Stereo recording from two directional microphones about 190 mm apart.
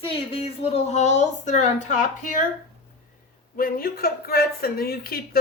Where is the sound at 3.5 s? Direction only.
50° left (ahead or behind).